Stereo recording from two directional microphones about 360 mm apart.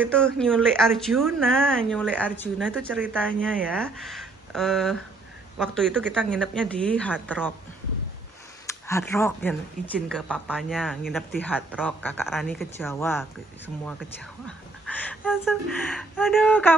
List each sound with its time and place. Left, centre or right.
0.0 s speech: centre
8.6 s speech: centre
14.9 s speech: centre